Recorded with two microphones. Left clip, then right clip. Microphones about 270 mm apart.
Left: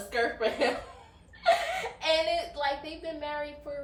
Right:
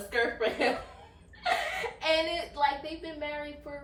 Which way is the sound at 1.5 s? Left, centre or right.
Centre.